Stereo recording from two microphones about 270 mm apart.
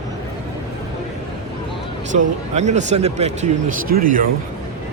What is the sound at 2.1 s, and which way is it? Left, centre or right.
A man's voice, right.